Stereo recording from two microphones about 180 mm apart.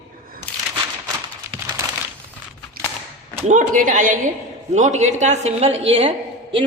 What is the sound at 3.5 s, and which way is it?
A woman's voice, 45° right (ahead or behind).